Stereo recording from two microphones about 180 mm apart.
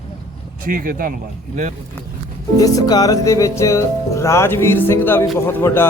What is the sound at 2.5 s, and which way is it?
Music, 20° left (ahead or behind).